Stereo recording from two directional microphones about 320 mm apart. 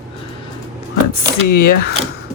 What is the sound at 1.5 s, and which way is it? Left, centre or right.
Speech, left.